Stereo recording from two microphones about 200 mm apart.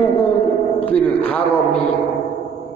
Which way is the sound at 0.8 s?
5° left (ahead or behind).